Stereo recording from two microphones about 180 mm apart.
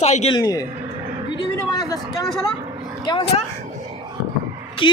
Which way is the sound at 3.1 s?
30° left (ahead or behind).